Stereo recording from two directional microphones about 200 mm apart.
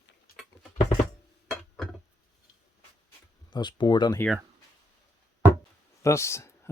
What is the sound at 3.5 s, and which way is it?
Speech, 20° left (ahead or behind).